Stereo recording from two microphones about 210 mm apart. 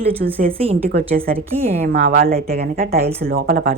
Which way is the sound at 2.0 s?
40° right (ahead or behind).